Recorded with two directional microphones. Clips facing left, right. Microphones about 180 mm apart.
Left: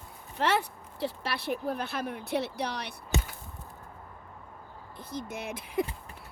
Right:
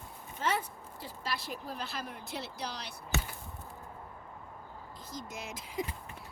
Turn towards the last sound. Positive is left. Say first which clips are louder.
# left 6 dB
turn(degrees=60)  # may be behind; listen again after turning